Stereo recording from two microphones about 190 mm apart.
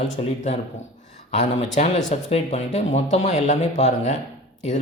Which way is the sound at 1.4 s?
40° left (ahead or behind).